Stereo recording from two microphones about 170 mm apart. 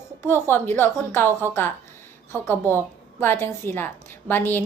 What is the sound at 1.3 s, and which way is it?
Speech, 15° right (ahead or behind).